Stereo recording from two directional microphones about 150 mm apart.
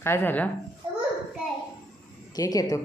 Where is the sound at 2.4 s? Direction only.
25° left (ahead or behind).